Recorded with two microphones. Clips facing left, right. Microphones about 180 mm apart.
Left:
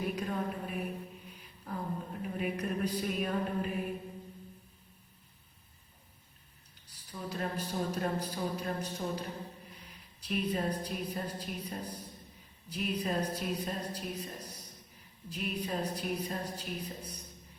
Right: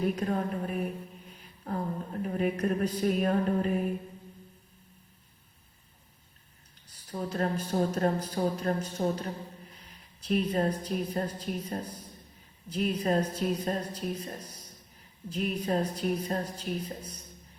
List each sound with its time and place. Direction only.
0.0 s speech: 45° right (ahead or behind)
1.7 s a sound: 50° right (ahead or behind)
2.2 s speech: 45° right (ahead or behind)
7.1 s speech: 45° right (ahead or behind)
10.2 s speech: 45° right (ahead or behind)